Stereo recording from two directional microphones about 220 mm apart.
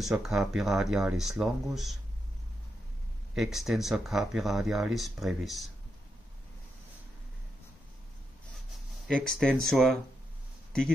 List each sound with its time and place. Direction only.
0.0 s speech: centre (ahead or behind)
3.3 s speech: centre (ahead or behind)
9.0 s speech: centre (ahead or behind)